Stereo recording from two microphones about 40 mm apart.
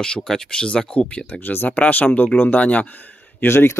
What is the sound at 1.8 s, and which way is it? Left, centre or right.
Speech, left.